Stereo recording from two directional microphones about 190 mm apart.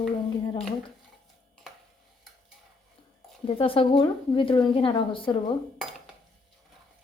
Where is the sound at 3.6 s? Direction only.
30° left (ahead or behind).